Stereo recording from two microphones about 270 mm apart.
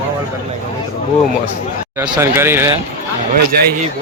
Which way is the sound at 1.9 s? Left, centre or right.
Centre.